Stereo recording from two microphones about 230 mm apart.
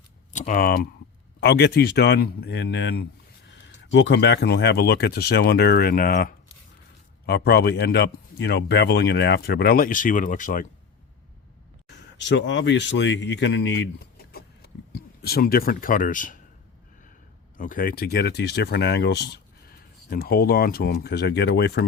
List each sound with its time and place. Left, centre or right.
0.3 s speech: left
11.9 s speech: left
14.2 s a sound: left
17.6 s speech: left